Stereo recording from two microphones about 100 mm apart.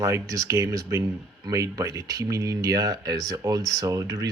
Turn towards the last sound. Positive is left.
turn(degrees=-35)  # may be behind; listen again after turning